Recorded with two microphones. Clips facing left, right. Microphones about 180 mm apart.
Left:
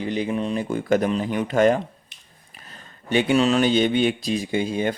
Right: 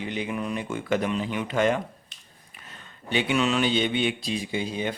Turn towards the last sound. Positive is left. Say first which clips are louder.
# left 6 dB
turn(degrees=50)  # may be behind; listen again after turning